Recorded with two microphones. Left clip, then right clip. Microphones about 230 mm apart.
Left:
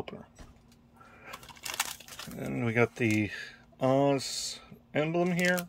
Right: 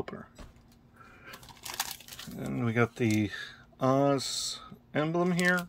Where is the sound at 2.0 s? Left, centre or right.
Centre.